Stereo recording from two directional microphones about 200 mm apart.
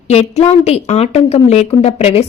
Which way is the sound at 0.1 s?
30° left (ahead or behind).